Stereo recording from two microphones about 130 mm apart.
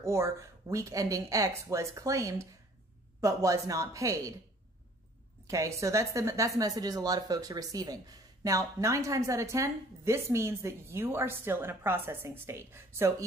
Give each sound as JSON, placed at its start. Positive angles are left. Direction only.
{"t": 0.0, "sound": "speech", "side_deg": -20}
{"t": 5.5, "sound": "speech", "side_deg": -25}